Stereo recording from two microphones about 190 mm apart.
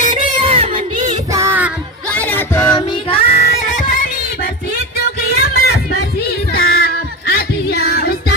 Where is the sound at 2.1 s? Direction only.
10° left (ahead or behind).